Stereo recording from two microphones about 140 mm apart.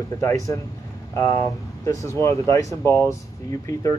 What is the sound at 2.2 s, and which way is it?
Speech, 20° left (ahead or behind).